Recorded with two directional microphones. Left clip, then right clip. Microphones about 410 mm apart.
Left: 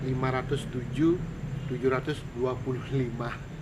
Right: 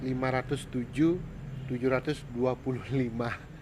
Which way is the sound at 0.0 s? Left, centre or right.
Right.